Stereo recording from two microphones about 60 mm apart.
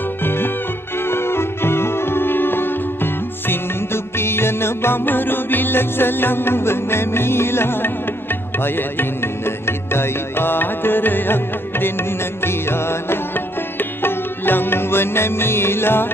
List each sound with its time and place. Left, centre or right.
0.2 s music: left